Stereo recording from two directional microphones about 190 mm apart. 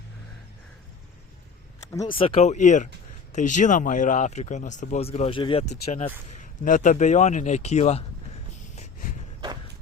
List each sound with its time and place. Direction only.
1.9 s speech: 20° left (ahead or behind)
2.1 s speech: 30° left (ahead or behind)